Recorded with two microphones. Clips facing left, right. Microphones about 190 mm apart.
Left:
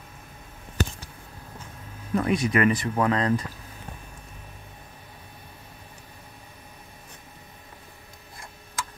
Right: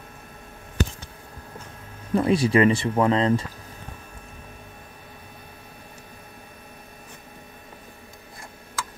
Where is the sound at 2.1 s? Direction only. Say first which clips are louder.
Right 4 dB; 30° right (ahead or behind).